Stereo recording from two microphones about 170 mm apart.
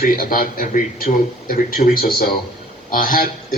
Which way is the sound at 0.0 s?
55° left (ahead or behind).